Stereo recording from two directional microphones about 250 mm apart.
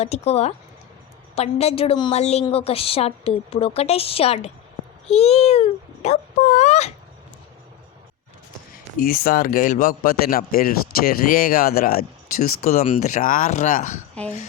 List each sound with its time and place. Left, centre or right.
0.0 s a woman's voice: left
8.7 s a man's voice: left